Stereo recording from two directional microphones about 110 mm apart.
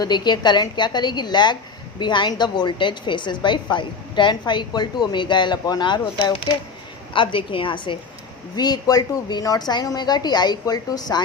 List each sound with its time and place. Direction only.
0.0 s a woman's voice: 40° left (ahead or behind)
8.5 s a woman's voice: 40° left (ahead or behind)